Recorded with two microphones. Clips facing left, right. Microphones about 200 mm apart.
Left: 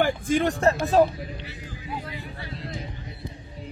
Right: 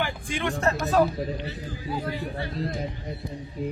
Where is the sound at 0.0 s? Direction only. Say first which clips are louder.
Left 7 dB; 40° left (ahead or behind).